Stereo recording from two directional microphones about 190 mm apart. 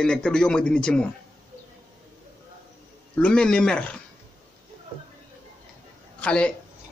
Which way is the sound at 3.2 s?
5° left (ahead or behind).